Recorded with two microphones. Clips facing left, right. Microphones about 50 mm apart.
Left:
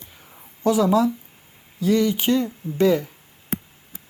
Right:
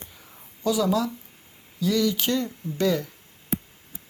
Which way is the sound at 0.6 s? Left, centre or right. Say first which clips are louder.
Left 5 dB; left.